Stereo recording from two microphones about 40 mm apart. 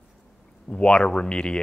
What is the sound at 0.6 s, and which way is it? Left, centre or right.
Speech, left.